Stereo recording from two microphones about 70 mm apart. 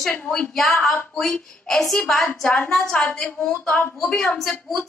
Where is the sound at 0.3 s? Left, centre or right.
Centre.